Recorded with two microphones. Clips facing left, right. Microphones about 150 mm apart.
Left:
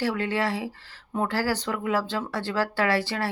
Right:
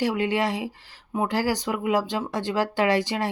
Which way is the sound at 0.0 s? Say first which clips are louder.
Right 2 dB; 15° right (ahead or behind).